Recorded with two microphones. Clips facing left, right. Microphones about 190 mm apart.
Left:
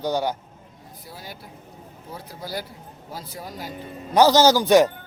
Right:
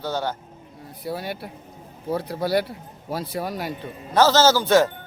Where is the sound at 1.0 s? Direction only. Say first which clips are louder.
Right 12 dB; 65° right (ahead or behind).